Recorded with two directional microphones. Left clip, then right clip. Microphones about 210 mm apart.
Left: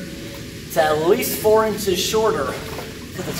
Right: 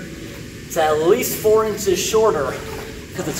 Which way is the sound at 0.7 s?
5° left (ahead or behind).